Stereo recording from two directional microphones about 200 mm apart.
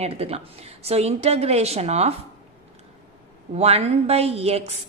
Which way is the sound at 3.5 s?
30° right (ahead or behind).